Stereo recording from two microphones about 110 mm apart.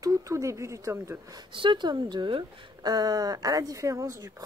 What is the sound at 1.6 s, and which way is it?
Speech, 45° right (ahead or behind).